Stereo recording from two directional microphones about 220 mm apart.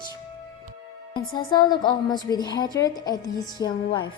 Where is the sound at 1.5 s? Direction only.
20° left (ahead or behind).